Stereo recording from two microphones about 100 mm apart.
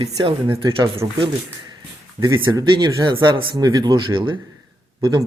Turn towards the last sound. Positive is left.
turn(degrees=-40)  # may be behind; listen again after turning